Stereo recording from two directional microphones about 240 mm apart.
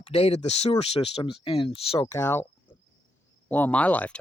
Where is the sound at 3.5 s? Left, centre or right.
Centre.